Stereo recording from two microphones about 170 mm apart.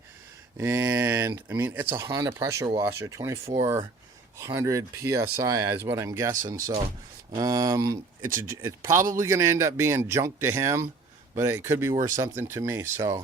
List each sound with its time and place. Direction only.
0.5 s speech: 15° right (ahead or behind)
7.3 s speech: 20° right (ahead or behind)